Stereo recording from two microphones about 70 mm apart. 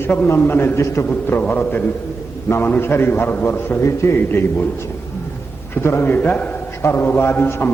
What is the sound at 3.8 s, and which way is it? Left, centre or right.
Speech, left.